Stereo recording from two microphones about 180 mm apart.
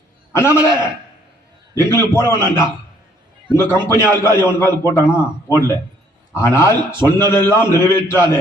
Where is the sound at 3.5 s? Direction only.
15° left (ahead or behind).